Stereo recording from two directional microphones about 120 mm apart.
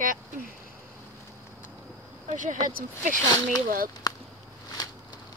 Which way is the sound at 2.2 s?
90° right.